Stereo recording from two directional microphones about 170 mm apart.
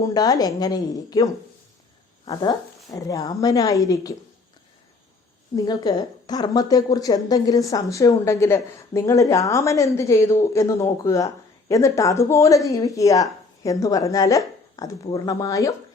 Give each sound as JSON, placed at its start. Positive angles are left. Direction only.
{"t": 0.0, "sound": "a woman's voice", "side_deg": 20}
{"t": 5.5, "sound": "a woman's voice", "side_deg": 25}